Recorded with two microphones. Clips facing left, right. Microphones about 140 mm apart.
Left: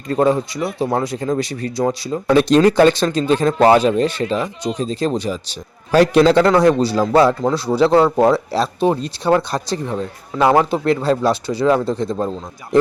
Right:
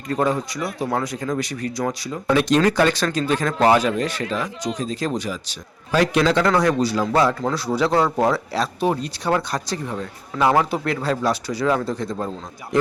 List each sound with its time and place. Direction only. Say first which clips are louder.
0.1 s speech: left 5 dB; 30° left (ahead or behind)